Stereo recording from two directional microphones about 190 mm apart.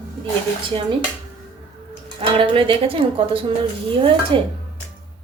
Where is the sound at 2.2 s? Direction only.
30° right (ahead or behind).